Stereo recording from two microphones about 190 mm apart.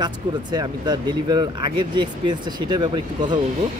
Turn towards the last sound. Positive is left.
turn(degrees=-25)  # may be behind; listen again after turning